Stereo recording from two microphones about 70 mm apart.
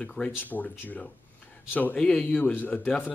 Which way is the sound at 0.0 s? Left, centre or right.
Centre.